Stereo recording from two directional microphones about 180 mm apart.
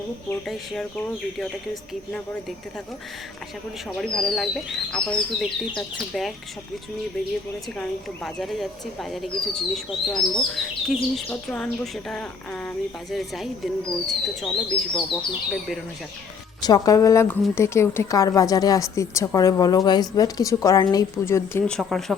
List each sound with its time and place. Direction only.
0.4 s speech: centre (ahead or behind)
3.9 s speech: centre (ahead or behind)
7.8 s speech: centre (ahead or behind)
16.6 s speech: 20° left (ahead or behind)
21.8 s speech: centre (ahead or behind)